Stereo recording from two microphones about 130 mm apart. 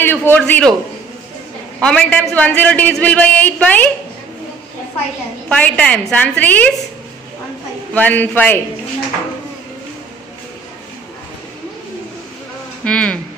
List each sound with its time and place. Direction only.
0.0 s a man's voice: 15° left (ahead or behind)
1.8 s a man's voice: 5° left (ahead or behind)
5.5 s a man's voice: 10° left (ahead or behind)
7.9 s a man's voice: 15° left (ahead or behind)
12.8 s a man's voice: 10° left (ahead or behind)